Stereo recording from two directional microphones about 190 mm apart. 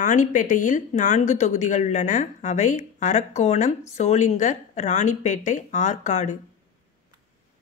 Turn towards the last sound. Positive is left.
turn(degrees=40)  # may be behind; listen again after turning